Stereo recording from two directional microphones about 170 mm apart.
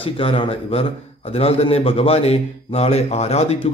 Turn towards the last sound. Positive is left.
turn(degrees=40)  # may be behind; listen again after turning